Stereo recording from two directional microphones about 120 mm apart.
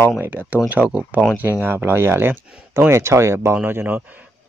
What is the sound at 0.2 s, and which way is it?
Speech, 15° right (ahead or behind).